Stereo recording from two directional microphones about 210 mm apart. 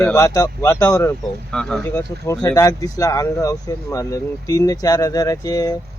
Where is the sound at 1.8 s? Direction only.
15° left (ahead or behind).